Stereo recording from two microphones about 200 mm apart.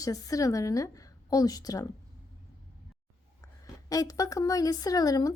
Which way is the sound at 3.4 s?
15° left (ahead or behind).